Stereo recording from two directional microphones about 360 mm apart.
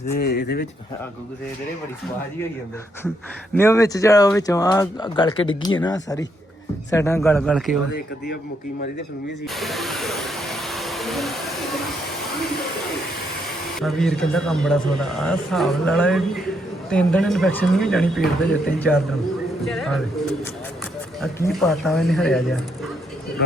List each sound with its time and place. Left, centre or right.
0.1 s speech: left
3.5 s speech: centre
9.6 s hair dryer: centre
13.7 s speech: centre
19.6 s a sound: centre
21.2 s speech: centre